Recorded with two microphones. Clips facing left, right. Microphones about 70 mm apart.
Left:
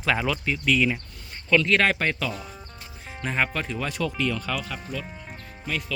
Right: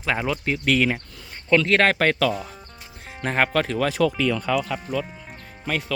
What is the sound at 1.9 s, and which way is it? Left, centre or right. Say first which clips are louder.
Speech: right 7 dB; right.